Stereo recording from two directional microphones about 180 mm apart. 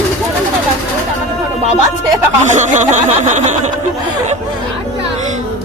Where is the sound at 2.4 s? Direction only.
40° right (ahead or behind).